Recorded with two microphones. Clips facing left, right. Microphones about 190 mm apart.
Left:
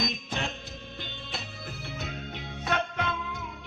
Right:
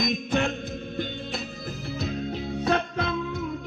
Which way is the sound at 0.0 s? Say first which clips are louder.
Right 8 dB; 55° right (ahead or behind).